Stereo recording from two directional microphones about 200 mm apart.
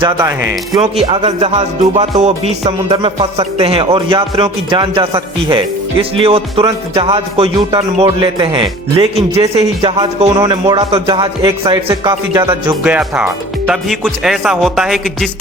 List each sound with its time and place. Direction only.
0.0 s speech: 15° right (ahead or behind)
0.8 s music: 30° right (ahead or behind)
10.2 s speech: 20° right (ahead or behind); by 15.3 s centre (ahead or behind)